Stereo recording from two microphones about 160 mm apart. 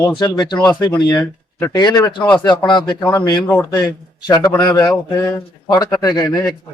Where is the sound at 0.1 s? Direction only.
30° left (ahead or behind).